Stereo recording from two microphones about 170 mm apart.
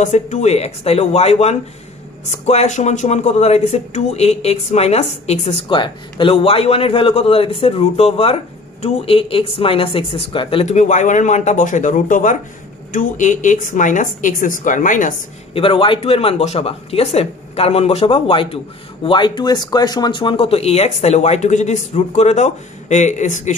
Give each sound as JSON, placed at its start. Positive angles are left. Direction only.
{"t": 0.0, "sound": "speech", "side_deg": 45}
{"t": 15.5, "sound": "speech", "side_deg": 30}